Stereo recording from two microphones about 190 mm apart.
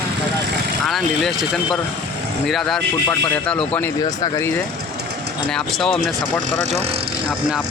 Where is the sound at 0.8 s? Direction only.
Centre (ahead or behind).